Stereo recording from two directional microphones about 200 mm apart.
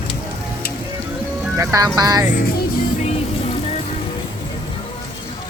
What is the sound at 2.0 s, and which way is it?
Speech, 20° right (ahead or behind).